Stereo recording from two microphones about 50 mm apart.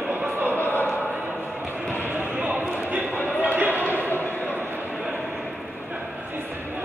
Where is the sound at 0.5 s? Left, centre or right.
Left.